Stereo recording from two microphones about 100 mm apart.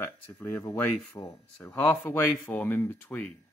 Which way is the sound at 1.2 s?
45° left (ahead or behind).